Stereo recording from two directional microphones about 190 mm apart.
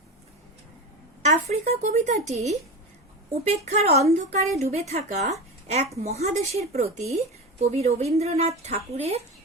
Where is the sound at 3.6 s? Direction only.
35° right (ahead or behind).